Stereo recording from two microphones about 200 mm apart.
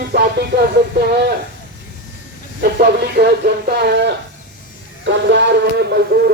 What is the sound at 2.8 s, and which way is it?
A man's voice, 55° right (ahead or behind).